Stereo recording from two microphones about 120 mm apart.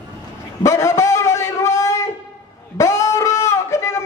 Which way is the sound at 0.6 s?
25° left (ahead or behind).